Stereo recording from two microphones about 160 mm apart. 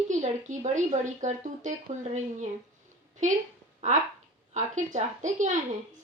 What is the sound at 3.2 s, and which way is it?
Speech, 50° right (ahead or behind).